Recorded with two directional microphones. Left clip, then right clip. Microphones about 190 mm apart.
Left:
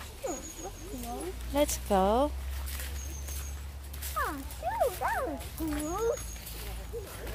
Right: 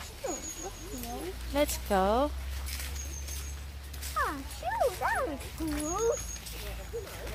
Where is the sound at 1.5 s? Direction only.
15° left (ahead or behind).